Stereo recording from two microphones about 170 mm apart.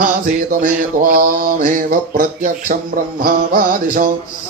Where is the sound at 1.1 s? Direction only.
55° right (ahead or behind).